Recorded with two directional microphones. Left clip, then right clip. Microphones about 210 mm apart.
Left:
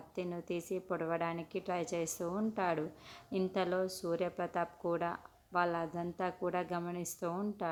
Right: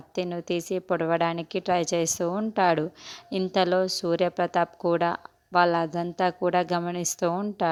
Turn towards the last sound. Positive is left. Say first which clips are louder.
# right 12 dB
turn(degrees=-40)  # may be behind; listen again after turning